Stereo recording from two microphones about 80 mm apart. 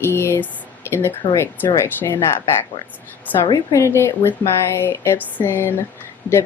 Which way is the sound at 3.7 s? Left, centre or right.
Left.